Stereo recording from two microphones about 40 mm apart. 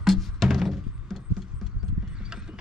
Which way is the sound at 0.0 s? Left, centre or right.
Centre.